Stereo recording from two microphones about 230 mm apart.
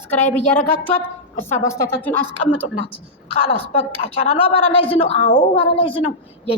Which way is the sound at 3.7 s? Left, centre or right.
Left.